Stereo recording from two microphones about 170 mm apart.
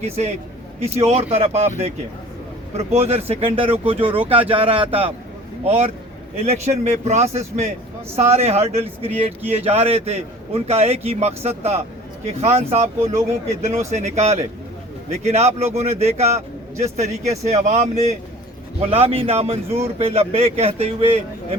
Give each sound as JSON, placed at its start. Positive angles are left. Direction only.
{"t": 0.0, "sound": "speech", "side_deg": -40}
{"t": 2.7, "sound": "speech", "side_deg": -40}